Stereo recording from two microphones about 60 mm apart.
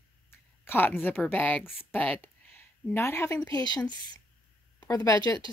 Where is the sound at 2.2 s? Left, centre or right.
Left.